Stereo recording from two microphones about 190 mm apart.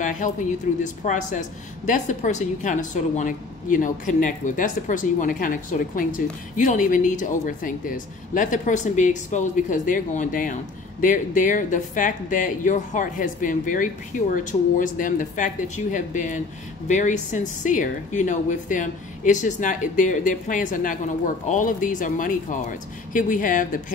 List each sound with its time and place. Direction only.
0.0 s a woman's voice: 45° left (ahead or behind)